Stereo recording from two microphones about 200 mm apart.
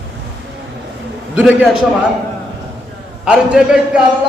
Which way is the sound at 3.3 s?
5° right (ahead or behind).